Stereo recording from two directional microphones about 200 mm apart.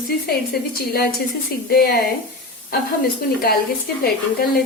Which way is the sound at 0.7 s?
50° left (ahead or behind).